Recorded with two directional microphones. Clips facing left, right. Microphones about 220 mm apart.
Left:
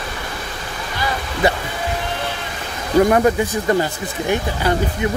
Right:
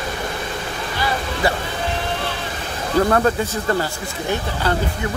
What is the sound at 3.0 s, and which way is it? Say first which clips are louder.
Speech: left 3 dB; 15° left (ahead or behind).